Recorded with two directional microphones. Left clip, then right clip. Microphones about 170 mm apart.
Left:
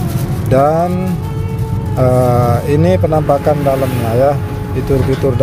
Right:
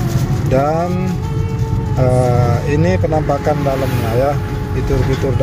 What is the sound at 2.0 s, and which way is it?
Speech, 30° left (ahead or behind).